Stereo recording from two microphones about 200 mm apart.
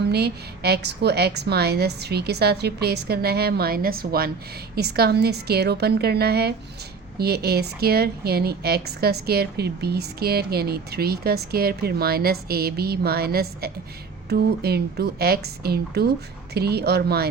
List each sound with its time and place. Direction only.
0.1 s speech: 55° right (ahead or behind)